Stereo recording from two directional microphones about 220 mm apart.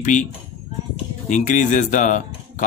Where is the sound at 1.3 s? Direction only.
35° left (ahead or behind).